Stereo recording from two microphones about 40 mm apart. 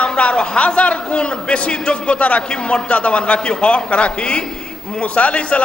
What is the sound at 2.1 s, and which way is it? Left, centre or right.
Speech, left.